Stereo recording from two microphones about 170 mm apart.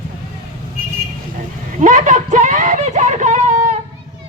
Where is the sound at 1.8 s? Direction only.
50° right (ahead or behind).